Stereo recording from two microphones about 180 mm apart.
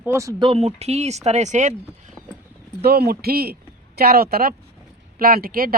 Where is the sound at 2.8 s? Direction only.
60° right (ahead or behind).